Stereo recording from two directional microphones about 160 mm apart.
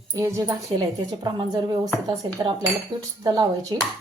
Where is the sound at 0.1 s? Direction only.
20° right (ahead or behind).